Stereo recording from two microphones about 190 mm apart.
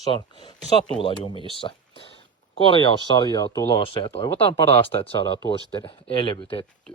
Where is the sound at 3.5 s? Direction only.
25° left (ahead or behind).